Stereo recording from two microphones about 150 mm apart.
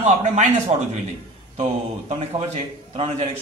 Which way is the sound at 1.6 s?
45° right (ahead or behind).